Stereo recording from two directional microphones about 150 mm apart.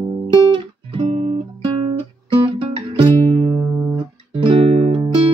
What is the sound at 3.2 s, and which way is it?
Music, 35° right (ahead or behind).